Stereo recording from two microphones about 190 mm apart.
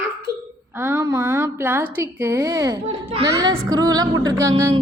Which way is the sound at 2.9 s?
30° right (ahead or behind).